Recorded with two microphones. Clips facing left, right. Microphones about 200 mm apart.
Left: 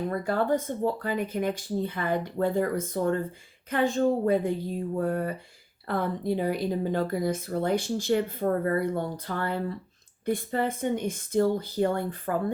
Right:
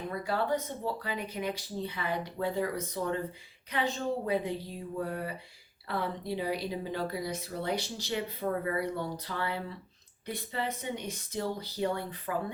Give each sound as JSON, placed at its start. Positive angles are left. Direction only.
{"t": 0.1, "sound": "a woman's voice", "side_deg": 50}